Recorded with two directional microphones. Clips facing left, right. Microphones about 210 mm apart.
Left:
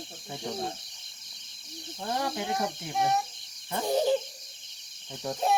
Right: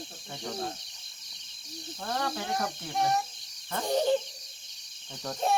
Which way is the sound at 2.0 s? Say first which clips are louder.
Left 2 dB; 15° left (ahead or behind).